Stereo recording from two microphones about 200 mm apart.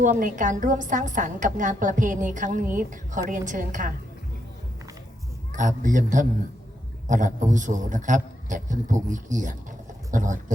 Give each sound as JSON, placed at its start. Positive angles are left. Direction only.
{"t": 0.0, "sound": "a woman's voice", "side_deg": -40}
{"t": 5.5, "sound": "a woman's voice", "side_deg": -40}